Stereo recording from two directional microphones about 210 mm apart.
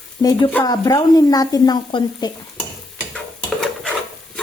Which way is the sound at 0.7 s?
20° left (ahead or behind).